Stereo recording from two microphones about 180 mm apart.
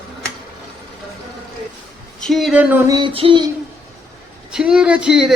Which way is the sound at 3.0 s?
30° right (ahead or behind).